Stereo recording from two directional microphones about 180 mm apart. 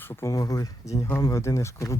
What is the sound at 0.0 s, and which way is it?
Speech, 15° left (ahead or behind).